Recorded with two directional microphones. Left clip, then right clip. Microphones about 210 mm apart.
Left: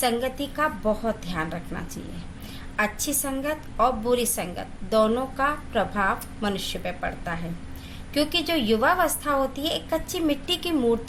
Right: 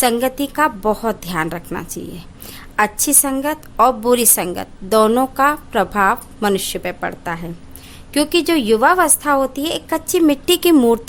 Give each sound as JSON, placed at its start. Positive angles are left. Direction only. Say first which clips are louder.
{"t": 0.0, "sound": "a woman's voice", "louder": "right 8 dB", "side_deg": -50}